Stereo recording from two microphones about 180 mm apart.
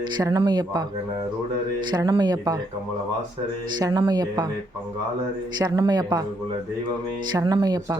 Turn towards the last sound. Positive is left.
turn(degrees=-20)  # may be behind; listen again after turning